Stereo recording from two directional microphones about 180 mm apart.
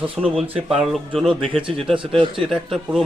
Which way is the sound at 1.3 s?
30° right (ahead or behind).